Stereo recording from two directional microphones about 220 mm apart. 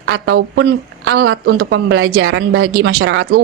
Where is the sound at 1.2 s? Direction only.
70° right (ahead or behind).